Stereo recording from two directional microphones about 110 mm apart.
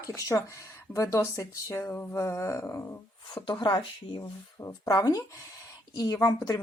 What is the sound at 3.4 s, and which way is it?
Speech, 45° left (ahead or behind).